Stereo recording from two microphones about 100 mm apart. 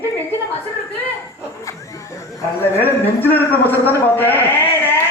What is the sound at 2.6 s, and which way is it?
A man's voice, 20° left (ahead or behind).